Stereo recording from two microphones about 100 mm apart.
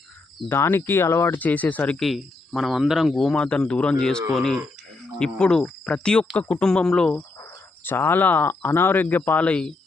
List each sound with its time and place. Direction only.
0.4 s speech: 25° left (ahead or behind)
1.4 s speech: 15° left (ahead or behind)
2.0 s speech: centre (ahead or behind)
7.9 s speech: 20° left (ahead or behind)